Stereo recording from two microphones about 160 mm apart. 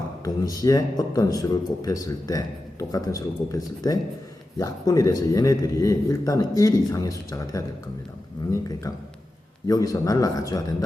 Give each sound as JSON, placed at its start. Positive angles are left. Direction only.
{"t": 0.4, "sound": "a man's voice", "side_deg": 25}
{"t": 9.6, "sound": "a man's voice", "side_deg": 20}